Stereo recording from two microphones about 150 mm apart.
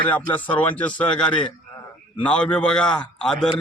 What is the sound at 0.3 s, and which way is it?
A man's voice, 10° left (ahead or behind).